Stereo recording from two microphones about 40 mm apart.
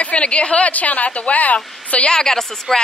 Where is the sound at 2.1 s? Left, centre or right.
Centre.